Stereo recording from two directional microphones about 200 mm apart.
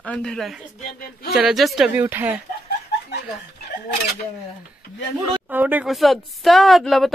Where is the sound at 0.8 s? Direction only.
50° left (ahead or behind).